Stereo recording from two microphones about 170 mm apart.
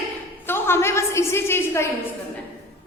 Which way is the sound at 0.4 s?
15° left (ahead or behind).